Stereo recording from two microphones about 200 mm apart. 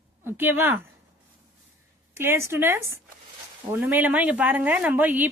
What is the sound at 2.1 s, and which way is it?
A woman's voice, 10° right (ahead or behind).